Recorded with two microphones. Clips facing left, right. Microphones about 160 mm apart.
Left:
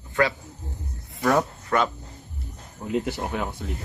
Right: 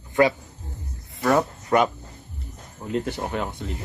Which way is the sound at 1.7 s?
25° right (ahead or behind).